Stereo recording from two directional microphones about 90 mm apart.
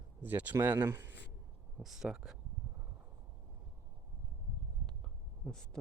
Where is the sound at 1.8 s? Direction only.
5° right (ahead or behind).